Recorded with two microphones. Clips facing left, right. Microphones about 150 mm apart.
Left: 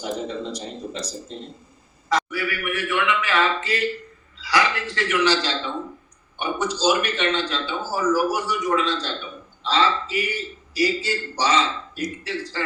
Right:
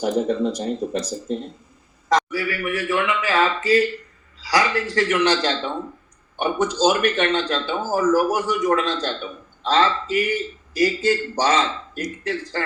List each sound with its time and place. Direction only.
0.0 s a man's voice: 55° right (ahead or behind)
2.0 s a man's voice: 40° right (ahead or behind)